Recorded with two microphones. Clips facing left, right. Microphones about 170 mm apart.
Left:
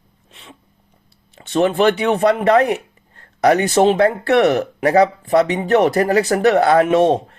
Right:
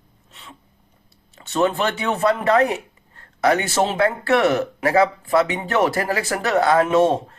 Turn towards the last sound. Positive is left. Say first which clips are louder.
# left 3 dB
turn(degrees=30)  # may be behind; listen again after turning